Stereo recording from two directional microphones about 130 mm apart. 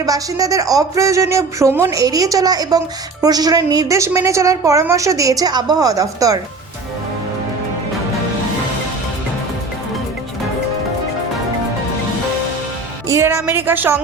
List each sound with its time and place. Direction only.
0.0 s speech: 25° right (ahead or behind)
13.1 s a woman's voice: 20° right (ahead or behind)